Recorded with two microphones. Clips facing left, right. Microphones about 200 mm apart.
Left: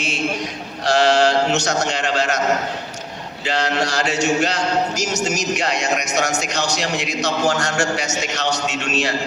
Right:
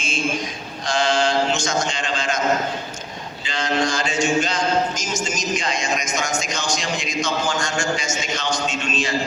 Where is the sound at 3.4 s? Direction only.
70° left (ahead or behind).